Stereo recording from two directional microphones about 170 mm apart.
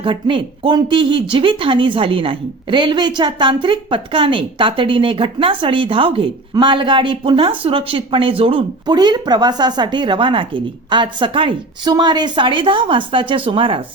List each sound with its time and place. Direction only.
0.0 s speech: 30° right (ahead or behind)